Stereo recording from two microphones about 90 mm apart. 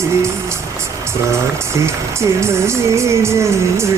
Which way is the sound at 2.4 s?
30° right (ahead or behind).